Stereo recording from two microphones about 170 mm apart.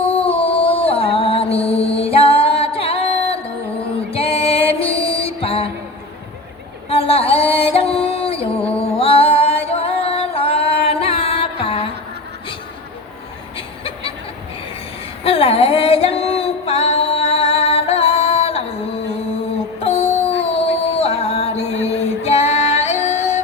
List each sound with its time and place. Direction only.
0.0 s music: 35° left (ahead or behind)
6.9 s a sound: 35° left (ahead or behind)
8.8 s music: 35° left (ahead or behind)
15.2 s female singing: 35° left (ahead or behind)
19.8 s music: 35° left (ahead or behind)